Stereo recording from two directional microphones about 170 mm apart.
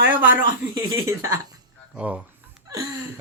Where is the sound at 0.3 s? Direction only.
55° left (ahead or behind).